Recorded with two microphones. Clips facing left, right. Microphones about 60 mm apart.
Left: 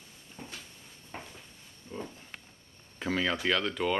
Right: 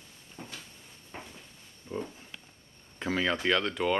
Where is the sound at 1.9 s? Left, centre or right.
Right.